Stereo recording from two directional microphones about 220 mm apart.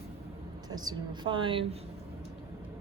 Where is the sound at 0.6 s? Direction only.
20° right (ahead or behind).